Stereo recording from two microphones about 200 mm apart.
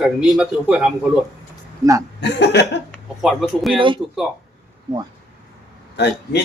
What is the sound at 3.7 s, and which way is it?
Speech, 25° right (ahead or behind).